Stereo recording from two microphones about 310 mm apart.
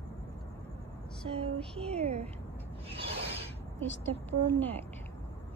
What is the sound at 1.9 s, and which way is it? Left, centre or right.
Speech, centre.